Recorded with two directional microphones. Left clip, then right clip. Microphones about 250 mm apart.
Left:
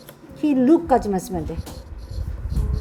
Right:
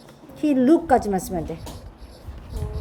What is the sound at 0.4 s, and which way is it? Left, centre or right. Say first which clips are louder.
Speech: left 1 dB; centre.